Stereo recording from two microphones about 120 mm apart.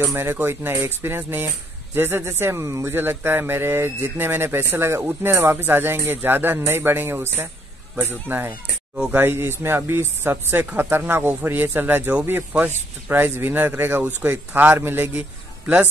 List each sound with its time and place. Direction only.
0.0 s speech: 20° right (ahead or behind)